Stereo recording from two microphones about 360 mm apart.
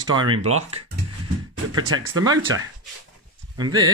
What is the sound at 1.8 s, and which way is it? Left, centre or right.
Speech, right.